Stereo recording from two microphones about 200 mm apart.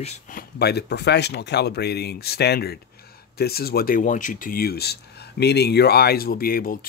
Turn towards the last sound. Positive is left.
turn(degrees=45)  # may be behind; listen again after turning